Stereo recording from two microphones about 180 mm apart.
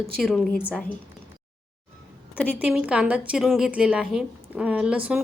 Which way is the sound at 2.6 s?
10° right (ahead or behind).